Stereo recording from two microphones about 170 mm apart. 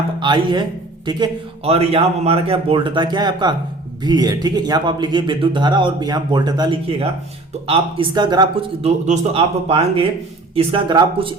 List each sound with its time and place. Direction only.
0.2 s speech: 30° right (ahead or behind)
8.8 s speech: 35° right (ahead or behind)